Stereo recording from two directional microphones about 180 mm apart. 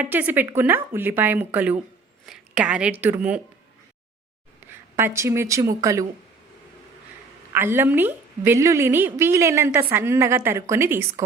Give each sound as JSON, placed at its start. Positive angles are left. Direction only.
{"t": 0.0, "sound": "a woman's voice", "side_deg": -10}
{"t": 4.6, "sound": "a sound", "side_deg": -10}
{"t": 4.9, "sound": "a woman's voice", "side_deg": -15}
{"t": 7.5, "sound": "a woman's voice", "side_deg": -10}